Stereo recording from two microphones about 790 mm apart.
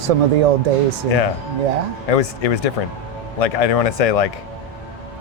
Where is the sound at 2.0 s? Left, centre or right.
Left.